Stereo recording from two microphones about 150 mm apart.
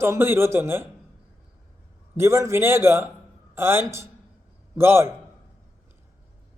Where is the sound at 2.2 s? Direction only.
20° right (ahead or behind).